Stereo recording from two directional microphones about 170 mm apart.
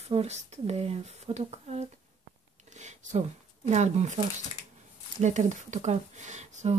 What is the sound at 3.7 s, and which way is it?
Speech, 40° right (ahead or behind).